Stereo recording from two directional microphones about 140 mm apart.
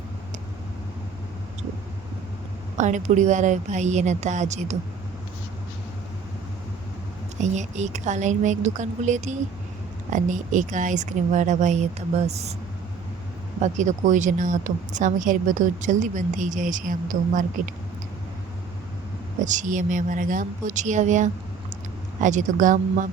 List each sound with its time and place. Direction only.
2.7 s a woman's voice: 60° right (ahead or behind)
7.3 s a woman's voice: 55° right (ahead or behind)
13.6 s a woman's voice: 60° right (ahead or behind)
19.5 s a woman's voice: 65° right (ahead or behind)